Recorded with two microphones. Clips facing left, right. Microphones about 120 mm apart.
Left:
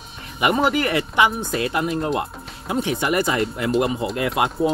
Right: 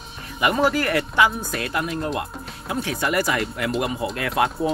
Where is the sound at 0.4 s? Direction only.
20° left (ahead or behind).